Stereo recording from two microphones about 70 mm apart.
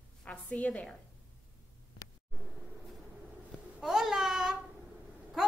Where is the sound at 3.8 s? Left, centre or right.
Centre.